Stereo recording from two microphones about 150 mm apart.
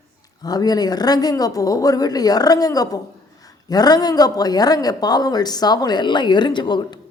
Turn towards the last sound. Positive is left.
turn(degrees=30)  # may be behind; listen again after turning